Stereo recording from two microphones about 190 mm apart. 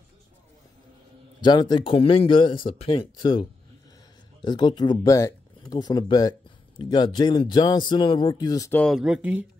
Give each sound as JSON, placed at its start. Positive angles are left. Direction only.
{"t": 1.4, "sound": "speech", "side_deg": 25}
{"t": 8.8, "sound": "speech", "side_deg": 0}